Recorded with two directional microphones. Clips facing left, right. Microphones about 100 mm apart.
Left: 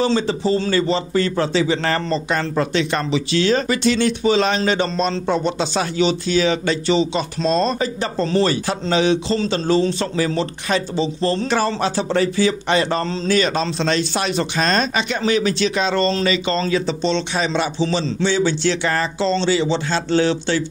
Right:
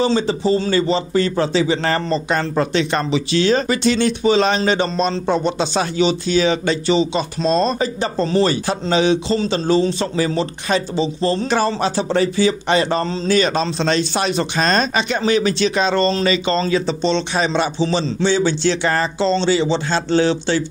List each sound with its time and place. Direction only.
0.0 s speech: 20° right (ahead or behind)
2.3 s speech: 30° right (ahead or behind)